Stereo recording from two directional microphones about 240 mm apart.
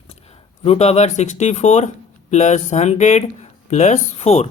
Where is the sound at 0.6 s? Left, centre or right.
Left.